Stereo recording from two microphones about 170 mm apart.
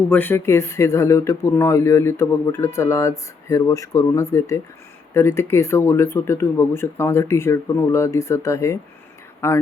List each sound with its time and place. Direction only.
0.1 s speech: 10° left (ahead or behind)